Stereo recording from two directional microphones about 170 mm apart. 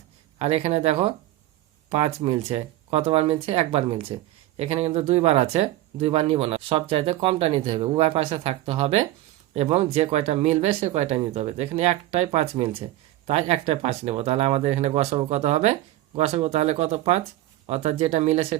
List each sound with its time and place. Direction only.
0.3 s speech: 40° right (ahead or behind)